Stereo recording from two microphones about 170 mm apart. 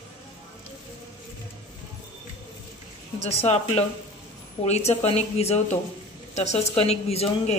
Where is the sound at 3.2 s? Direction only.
40° left (ahead or behind).